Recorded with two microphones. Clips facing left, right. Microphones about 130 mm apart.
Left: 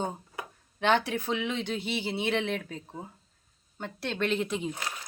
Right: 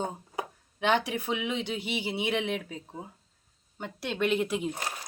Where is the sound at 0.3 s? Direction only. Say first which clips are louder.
Right 4 dB; 10° right (ahead or behind).